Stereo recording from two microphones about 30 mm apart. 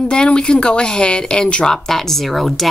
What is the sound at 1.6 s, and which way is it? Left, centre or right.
A woman's voice, centre.